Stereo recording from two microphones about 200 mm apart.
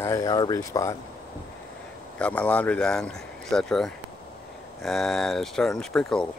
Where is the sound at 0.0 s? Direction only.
15° left (ahead or behind).